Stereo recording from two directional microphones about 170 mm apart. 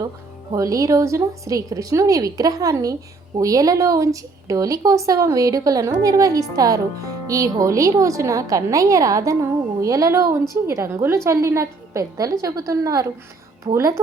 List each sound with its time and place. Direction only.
0.5 s a woman's voice: 20° right (ahead or behind)